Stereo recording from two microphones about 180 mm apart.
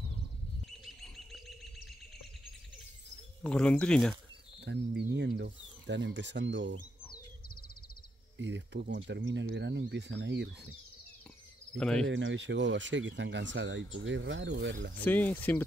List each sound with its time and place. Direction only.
1.0 s bird: 5° left (ahead or behind)
3.4 s speech: 5° left (ahead or behind)
4.6 s speech: 70° right (ahead or behind); by 6.8 s 90° right
8.4 s speech: 85° right
11.7 s speech: 5° left (ahead or behind)
12.1 s speech: 90° right
15.0 s speech: 10° left (ahead or behind)